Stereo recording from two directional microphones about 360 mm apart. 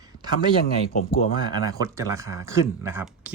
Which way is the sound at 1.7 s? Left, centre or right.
Centre.